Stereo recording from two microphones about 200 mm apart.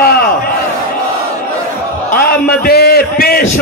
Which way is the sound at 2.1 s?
50° left (ahead or behind).